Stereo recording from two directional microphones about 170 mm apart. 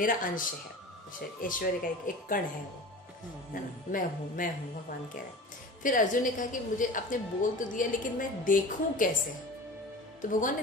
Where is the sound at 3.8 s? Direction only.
55° left (ahead or behind).